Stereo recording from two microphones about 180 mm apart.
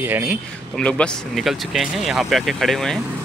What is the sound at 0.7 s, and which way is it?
Speech, 5° left (ahead or behind).